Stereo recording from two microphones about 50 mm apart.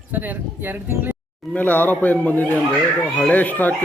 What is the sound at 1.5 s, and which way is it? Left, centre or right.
A woman's voice, left.